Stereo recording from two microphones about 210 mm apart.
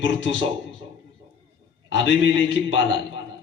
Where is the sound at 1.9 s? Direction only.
60° left (ahead or behind).